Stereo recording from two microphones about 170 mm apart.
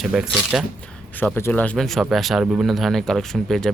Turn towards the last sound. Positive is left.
turn(degrees=0)  # may be behind; listen again after turning